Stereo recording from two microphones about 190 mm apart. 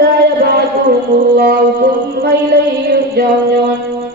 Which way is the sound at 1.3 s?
55° right (ahead or behind).